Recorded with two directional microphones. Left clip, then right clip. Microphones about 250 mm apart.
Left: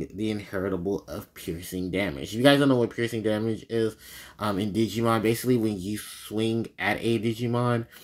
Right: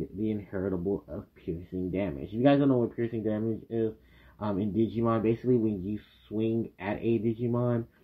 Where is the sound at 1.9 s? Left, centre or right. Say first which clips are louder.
Left 5 dB; centre.